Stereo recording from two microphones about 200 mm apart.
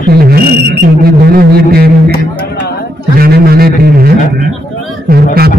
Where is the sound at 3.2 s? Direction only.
50° right (ahead or behind).